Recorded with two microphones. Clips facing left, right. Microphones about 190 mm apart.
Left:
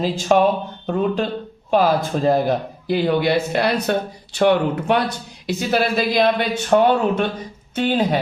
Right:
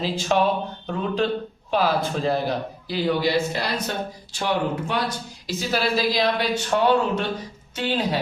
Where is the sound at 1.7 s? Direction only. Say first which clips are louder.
Left 5 dB; 45° left (ahead or behind).